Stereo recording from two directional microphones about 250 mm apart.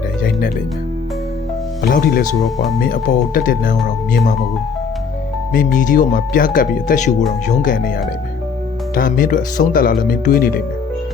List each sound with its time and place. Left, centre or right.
0.2 s music: left
1.8 s speech: left
5.5 s speech: left
9.0 s speech: left